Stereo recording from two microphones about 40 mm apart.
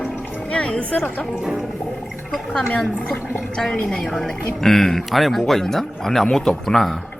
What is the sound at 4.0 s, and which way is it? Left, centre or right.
Speech, centre.